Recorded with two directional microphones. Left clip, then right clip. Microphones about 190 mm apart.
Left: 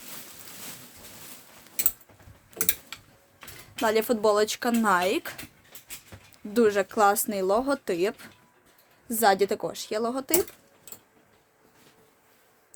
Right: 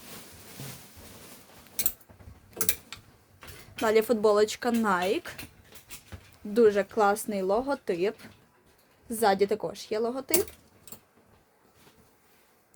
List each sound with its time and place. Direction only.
2.9 s typing: centre (ahead or behind)
3.8 s speech: 10° left (ahead or behind)
6.5 s speech: 25° left (ahead or behind)